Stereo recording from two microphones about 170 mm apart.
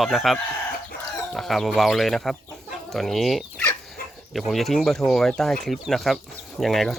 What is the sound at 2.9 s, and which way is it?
Chicken, centre (ahead or behind).